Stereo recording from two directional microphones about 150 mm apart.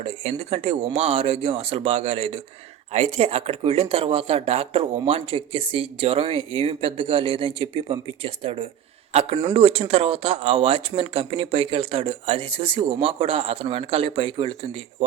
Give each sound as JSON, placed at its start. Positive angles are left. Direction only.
{"t": 0.0, "sound": "speech", "side_deg": -45}